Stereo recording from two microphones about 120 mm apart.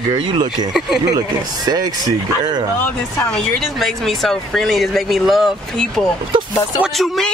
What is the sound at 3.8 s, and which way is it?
Speech, centre (ahead or behind).